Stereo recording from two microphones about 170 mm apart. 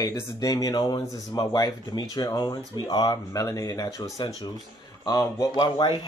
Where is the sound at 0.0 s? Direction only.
20° left (ahead or behind).